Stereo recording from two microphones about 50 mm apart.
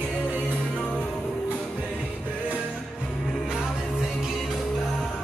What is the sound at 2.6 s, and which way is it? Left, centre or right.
Music, centre.